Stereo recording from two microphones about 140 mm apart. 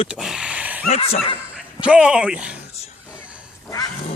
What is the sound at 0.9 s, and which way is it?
Speech, 45° left (ahead or behind).